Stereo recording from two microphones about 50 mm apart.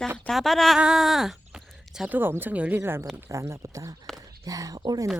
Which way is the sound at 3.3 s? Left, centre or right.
Right.